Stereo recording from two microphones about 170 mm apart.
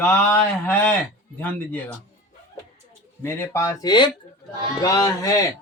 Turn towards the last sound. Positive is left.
turn(degrees=20)  # may be behind; listen again after turning